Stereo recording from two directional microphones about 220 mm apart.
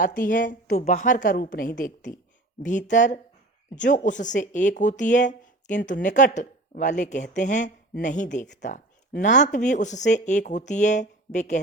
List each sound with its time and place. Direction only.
0.0 s a woman's voice: 40° left (ahead or behind)